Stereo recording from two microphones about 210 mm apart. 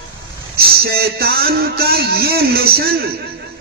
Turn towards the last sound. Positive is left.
turn(degrees=-45)  # may be behind; listen again after turning